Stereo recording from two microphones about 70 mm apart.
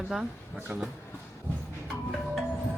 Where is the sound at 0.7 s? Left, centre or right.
Right.